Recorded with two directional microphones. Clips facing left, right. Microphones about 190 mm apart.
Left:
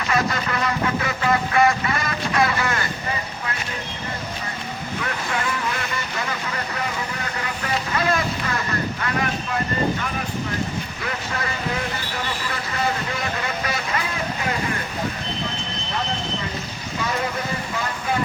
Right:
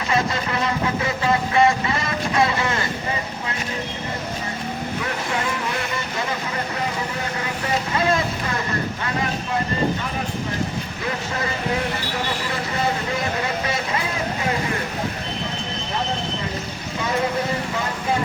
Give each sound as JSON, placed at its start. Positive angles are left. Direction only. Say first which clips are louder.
{"t": 0.1, "sound": "vehicle", "louder": "right 1 dB", "side_deg": -25}
{"t": 13.7, "sound": "vehicle", "louder": "right 1 dB", "side_deg": -25}